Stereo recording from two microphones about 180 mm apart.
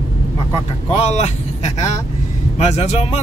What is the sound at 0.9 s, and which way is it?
Speech, 35° left (ahead or behind).